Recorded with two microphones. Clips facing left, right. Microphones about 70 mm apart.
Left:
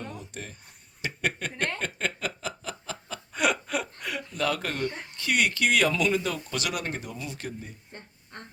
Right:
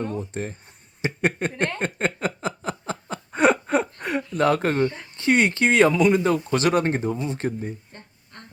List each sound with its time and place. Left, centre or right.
0.0 s speech: right
1.8 s a sound: right
5.1 s speech: right